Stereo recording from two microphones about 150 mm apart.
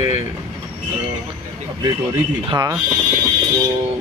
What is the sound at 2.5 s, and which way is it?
Speech, 25° right (ahead or behind).